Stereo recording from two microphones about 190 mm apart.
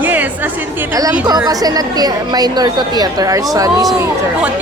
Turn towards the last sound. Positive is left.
turn(degrees=-20)  # may be behind; listen again after turning